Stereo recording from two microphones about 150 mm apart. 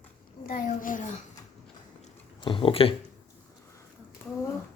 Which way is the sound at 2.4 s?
35° left (ahead or behind).